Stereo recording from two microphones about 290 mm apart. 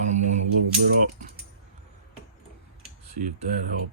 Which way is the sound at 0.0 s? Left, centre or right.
Right.